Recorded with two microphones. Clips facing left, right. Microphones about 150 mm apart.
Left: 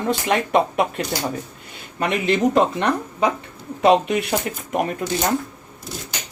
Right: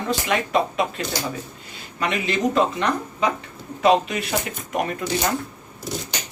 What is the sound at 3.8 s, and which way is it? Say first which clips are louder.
Speech: left 2 dB; 60° left (ahead or behind).